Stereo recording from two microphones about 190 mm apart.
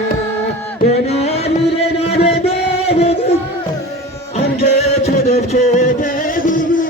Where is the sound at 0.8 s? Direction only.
35° left (ahead or behind).